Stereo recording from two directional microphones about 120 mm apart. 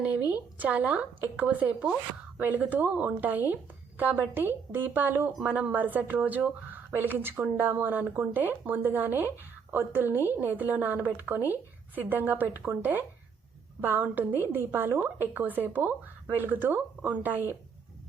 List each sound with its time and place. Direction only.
0.3 s a woman's voice: 10° right (ahead or behind)